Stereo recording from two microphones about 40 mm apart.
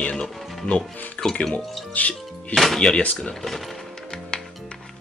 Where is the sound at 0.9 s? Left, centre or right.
Left.